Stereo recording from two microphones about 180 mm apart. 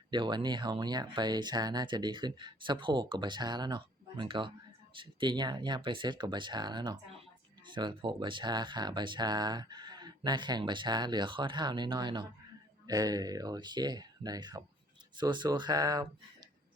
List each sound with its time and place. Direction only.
0.1 s speech: 25° right (ahead or behind)